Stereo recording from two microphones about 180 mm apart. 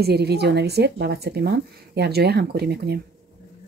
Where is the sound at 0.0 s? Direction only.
65° right (ahead or behind).